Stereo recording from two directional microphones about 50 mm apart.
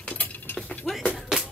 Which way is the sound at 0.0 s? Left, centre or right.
Left.